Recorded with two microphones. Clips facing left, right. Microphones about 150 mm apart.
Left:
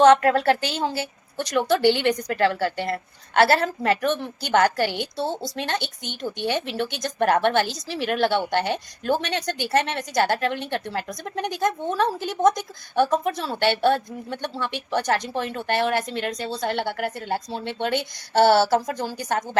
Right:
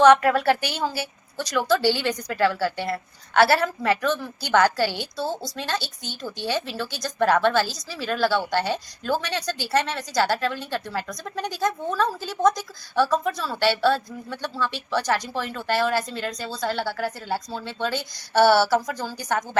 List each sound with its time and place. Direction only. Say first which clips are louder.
0.3 s a woman's voice: left 1 dB; 25° left (ahead or behind)